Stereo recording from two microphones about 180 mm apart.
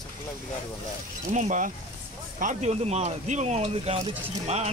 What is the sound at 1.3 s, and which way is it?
Speech, 40° right (ahead or behind).